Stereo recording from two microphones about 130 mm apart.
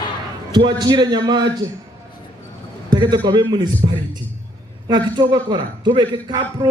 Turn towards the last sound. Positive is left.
turn(degrees=-35)  # may be behind; listen again after turning